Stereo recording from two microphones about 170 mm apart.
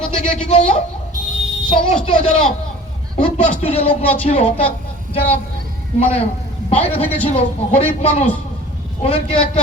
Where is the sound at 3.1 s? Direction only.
35° left (ahead or behind).